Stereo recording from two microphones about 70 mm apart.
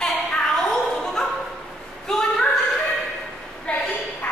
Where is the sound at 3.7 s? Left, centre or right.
Centre.